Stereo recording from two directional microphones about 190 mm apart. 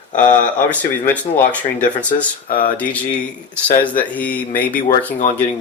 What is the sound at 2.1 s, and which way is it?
Speech, 50° left (ahead or behind).